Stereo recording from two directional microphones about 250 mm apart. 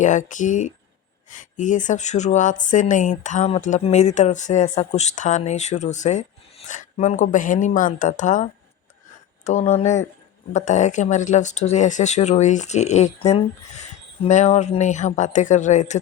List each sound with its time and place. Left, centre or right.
0.0 s speech: left